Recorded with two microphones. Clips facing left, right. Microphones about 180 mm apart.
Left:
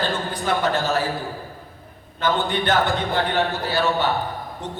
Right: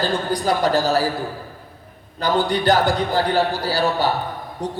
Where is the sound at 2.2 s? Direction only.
35° right (ahead or behind).